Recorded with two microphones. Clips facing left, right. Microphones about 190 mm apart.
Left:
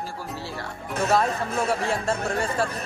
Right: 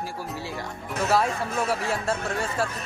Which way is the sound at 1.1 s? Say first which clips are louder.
Left 1 dB; 5° right (ahead or behind).